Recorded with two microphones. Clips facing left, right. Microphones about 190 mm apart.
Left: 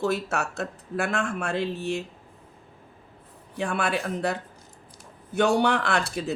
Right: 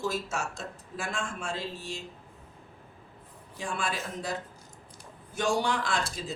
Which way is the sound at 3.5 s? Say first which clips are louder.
Left 7 dB; 65° left (ahead or behind).